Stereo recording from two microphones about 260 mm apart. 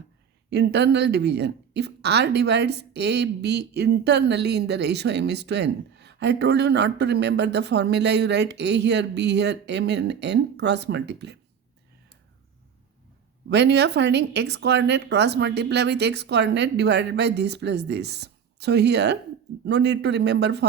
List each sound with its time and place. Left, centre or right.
0.5 s speech: right
13.5 s speech: right